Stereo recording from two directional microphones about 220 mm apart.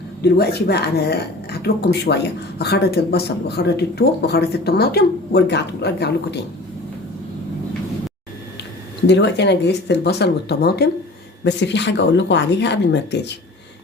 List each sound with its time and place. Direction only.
0.2 s speech: 45° left (ahead or behind)
9.0 s speech: 50° left (ahead or behind)